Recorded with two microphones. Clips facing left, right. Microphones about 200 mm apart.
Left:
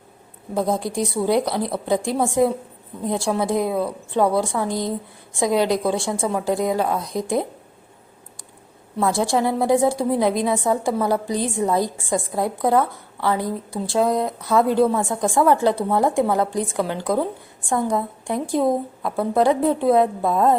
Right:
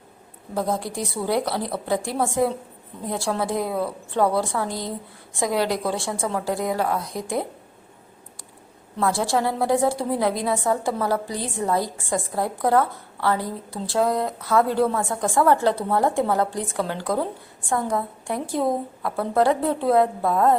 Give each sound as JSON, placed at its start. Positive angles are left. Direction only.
{"t": 0.5, "sound": "a woman's voice", "side_deg": 15}
{"t": 9.0, "sound": "a woman's voice", "side_deg": 15}